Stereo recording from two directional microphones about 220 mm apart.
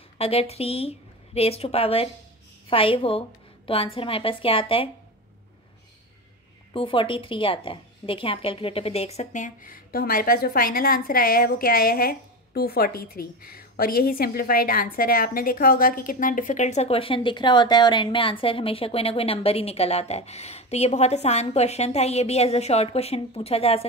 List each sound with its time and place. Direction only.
0.2 s a woman's voice: 25° left (ahead or behind)
6.7 s a woman's voice: 25° left (ahead or behind)